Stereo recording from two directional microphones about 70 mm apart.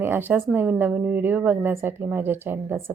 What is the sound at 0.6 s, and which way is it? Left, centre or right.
A woman's voice, centre.